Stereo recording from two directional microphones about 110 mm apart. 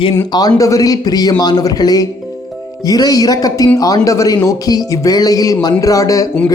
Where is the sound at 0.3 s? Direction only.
35° left (ahead or behind).